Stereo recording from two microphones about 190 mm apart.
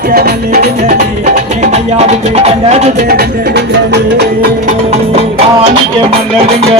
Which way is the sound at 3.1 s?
55° right (ahead or behind).